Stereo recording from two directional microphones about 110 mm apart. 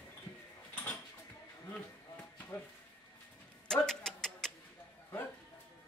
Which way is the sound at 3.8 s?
5° left (ahead or behind).